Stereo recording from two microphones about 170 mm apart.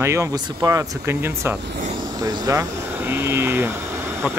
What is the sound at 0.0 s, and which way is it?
Speech, 15° right (ahead or behind).